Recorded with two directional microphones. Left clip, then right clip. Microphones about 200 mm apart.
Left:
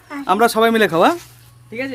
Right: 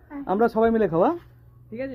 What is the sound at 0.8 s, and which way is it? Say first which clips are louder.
Speech: left 7 dB; 55° left (ahead or behind).